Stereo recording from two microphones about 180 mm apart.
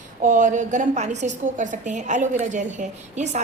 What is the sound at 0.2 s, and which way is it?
A woman's voice, 45° right (ahead or behind).